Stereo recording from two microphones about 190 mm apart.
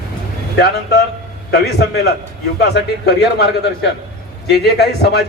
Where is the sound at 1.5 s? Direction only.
60° left (ahead or behind).